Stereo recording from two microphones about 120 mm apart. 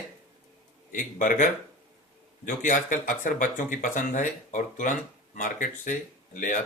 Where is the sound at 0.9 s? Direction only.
90° left.